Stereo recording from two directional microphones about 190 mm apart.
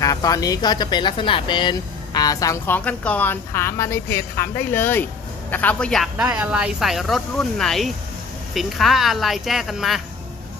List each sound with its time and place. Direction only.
0.0 s a woman's voice: 20° left (ahead or behind); by 6.2 s centre (ahead or behind)
6.2 s speech: 10° right (ahead or behind)